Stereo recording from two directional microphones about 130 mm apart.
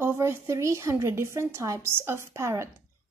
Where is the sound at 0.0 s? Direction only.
20° right (ahead or behind).